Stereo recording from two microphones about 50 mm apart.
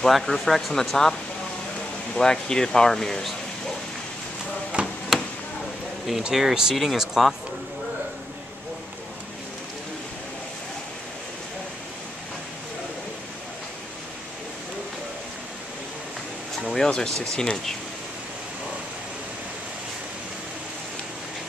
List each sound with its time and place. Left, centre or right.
0.0 s speech: centre
2.1 s speech: centre
4.7 s a sound: right
5.1 s a sound: centre
6.3 s speech: centre
16.7 s speech: centre